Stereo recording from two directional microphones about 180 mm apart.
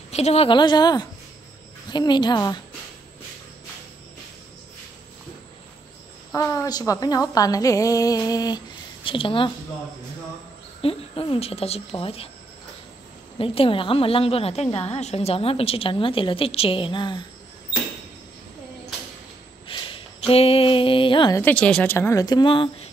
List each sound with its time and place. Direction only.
0.1 s a woman's voice: 35° left (ahead or behind)
6.3 s a woman's voice: 20° left (ahead or behind)
10.8 s a woman's voice: 30° left (ahead or behind)
13.4 s a woman's voice: 30° left (ahead or behind)
19.7 s speech: 30° left (ahead or behind)
21.4 s speech: 10° left (ahead or behind); by 22.8 s 30° left (ahead or behind)